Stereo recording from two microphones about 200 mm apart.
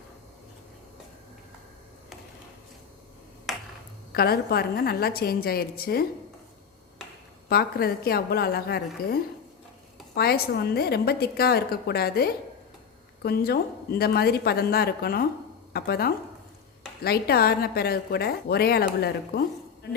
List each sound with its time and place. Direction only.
3.5 s finger snapping: centre (ahead or behind)
4.1 s a woman's voice: 50° left (ahead or behind)
7.5 s a woman's voice: 50° left (ahead or behind)
10.2 s a woman's voice: 50° left (ahead or behind)